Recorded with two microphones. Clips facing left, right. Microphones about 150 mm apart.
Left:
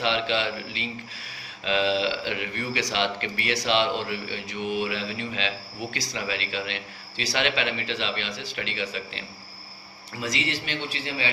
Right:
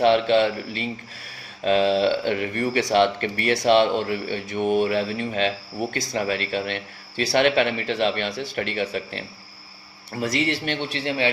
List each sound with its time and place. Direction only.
0.0 s a man's voice: 50° right (ahead or behind); by 11.3 s 65° right (ahead or behind)